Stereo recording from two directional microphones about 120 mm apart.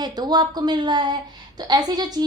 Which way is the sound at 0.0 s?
35° right (ahead or behind).